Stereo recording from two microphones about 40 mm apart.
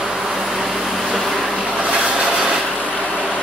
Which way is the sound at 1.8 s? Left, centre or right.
Right.